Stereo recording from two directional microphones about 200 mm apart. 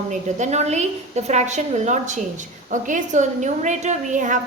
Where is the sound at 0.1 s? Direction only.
35° right (ahead or behind).